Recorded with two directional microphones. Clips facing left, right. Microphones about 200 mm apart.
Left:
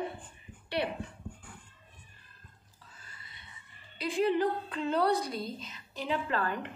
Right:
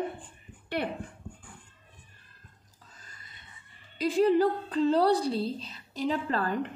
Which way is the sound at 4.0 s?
40° right (ahead or behind).